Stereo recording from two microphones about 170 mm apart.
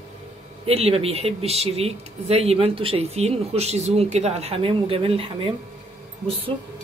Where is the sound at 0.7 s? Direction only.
35° right (ahead or behind).